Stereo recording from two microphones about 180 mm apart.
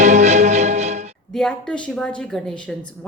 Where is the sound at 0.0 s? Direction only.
40° right (ahead or behind).